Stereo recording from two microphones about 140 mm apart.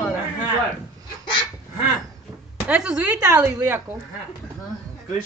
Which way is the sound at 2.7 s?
5° right (ahead or behind).